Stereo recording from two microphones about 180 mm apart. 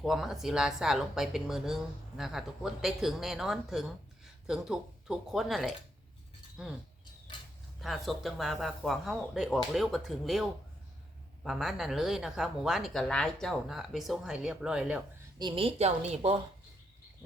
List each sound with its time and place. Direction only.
0.0 s a woman's voice: centre (ahead or behind)
7.8 s a woman's voice: centre (ahead or behind)
15.4 s a woman's voice: 25° right (ahead or behind)